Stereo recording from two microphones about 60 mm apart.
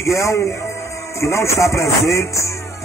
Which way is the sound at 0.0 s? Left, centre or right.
Left.